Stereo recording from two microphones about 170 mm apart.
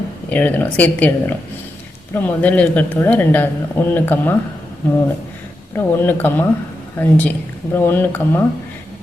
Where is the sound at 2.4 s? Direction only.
10° left (ahead or behind).